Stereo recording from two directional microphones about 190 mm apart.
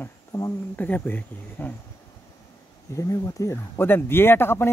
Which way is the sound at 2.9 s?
15° left (ahead or behind).